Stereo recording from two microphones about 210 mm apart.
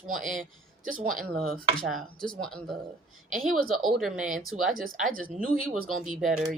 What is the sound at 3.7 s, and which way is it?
Speech, centre (ahead or behind).